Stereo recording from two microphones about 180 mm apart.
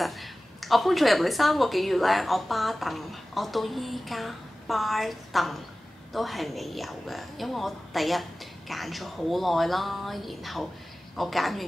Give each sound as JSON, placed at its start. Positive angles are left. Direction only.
{"t": 0.0, "sound": "a woman's voice", "side_deg": 0}